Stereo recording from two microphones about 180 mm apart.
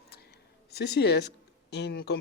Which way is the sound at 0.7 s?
65° left (ahead or behind).